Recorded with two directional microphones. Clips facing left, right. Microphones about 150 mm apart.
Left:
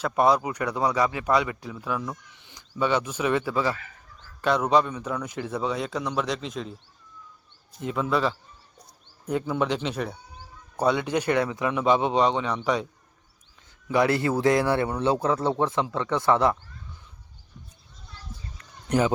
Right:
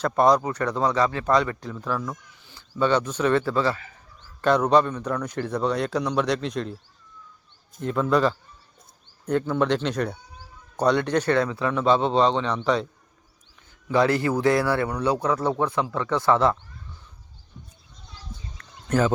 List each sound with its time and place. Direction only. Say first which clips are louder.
0.0 s a man's voice: right 2 dB; 10° left (ahead or behind)
7.8 s a man's voice: right 4 dB; 5° left (ahead or behind)
18.9 s speech: right 1 dB; 15° left (ahead or behind)